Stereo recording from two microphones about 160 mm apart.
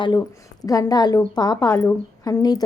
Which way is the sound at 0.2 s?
20° left (ahead or behind).